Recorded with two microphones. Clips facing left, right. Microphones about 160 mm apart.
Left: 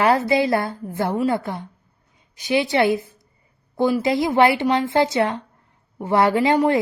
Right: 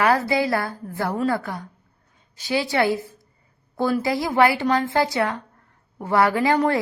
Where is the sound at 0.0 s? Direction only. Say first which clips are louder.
Left 2 dB; 25° left (ahead or behind).